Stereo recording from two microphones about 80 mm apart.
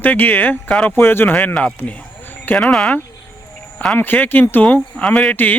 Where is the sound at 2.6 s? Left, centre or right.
Centre.